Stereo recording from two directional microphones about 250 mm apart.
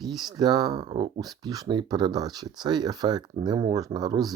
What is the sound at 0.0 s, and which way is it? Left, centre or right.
Speech, centre.